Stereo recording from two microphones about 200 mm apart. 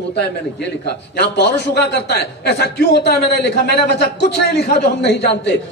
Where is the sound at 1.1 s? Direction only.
55° left (ahead or behind).